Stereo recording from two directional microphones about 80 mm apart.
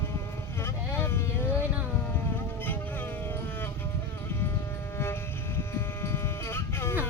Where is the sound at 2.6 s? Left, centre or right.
Left.